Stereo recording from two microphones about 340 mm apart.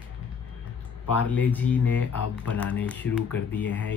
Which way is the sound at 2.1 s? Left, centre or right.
Left.